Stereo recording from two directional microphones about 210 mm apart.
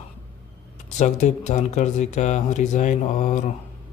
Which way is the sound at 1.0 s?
35° left (ahead or behind).